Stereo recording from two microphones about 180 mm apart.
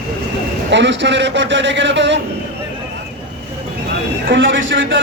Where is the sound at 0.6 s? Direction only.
80° right.